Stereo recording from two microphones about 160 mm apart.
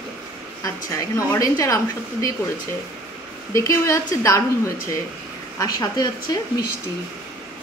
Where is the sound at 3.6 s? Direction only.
20° left (ahead or behind).